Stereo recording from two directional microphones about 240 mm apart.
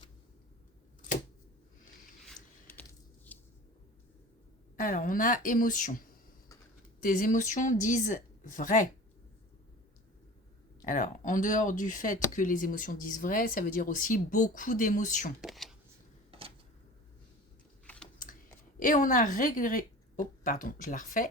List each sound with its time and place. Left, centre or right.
2.2 s a sound: centre
4.8 s speech: left
7.0 s speech: left
10.8 s speech: left
15.4 s speech: centre
17.8 s a sound: centre
18.8 s speech: left